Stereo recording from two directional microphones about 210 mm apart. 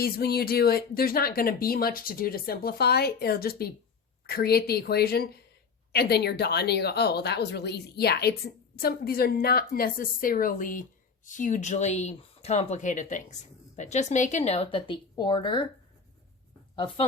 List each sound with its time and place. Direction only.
0.0 s speech: 45° left (ahead or behind); by 15.6 s 20° left (ahead or behind)
16.7 s speech: 25° left (ahead or behind)